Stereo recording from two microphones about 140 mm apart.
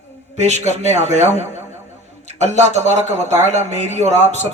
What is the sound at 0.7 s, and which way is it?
Speech, 55° right (ahead or behind).